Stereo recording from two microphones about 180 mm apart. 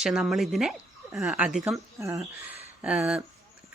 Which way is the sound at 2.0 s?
15° right (ahead or behind).